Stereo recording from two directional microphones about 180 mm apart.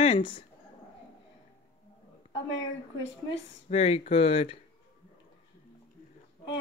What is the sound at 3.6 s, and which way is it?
Speech, 35° left (ahead or behind).